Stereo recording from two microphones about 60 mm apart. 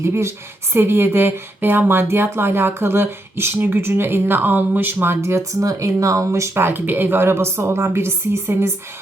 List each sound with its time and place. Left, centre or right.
0.0 s speech: right
5.2 s speech: right
5.5 s speech: right